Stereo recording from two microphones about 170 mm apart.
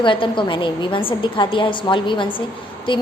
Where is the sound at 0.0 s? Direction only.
30° left (ahead or behind).